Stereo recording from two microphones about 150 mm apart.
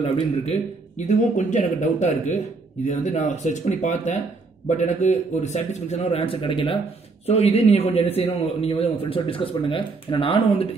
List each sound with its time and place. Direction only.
0.0 s a man's voice: 50° left (ahead or behind); by 6.8 s 35° left (ahead or behind)
7.2 s a man's voice: 45° left (ahead or behind)